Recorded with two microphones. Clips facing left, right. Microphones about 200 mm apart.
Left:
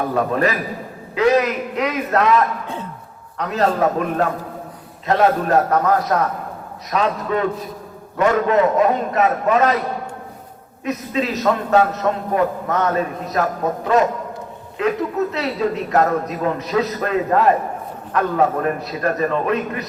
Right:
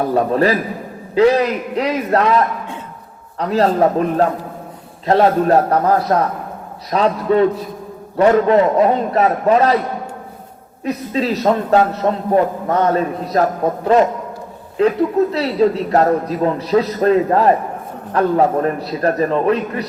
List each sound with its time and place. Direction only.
0.0 s a man's voice: 35° right (ahead or behind)
10.8 s a man's voice: 35° right (ahead or behind)
14.8 s a man's voice: 35° right (ahead or behind)